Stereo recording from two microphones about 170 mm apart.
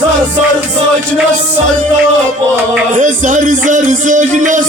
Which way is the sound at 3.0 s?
50° right (ahead or behind).